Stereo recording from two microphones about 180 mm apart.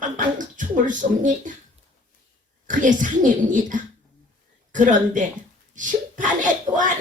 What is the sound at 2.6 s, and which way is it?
Speech, 45° right (ahead or behind).